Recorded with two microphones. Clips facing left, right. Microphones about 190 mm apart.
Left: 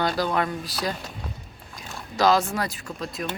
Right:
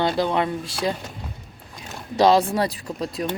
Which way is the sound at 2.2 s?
30° right (ahead or behind).